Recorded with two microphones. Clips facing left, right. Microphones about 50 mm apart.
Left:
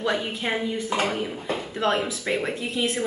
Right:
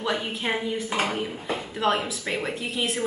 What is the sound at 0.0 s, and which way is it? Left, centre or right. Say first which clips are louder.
A woman's voice: left 2 dB; centre.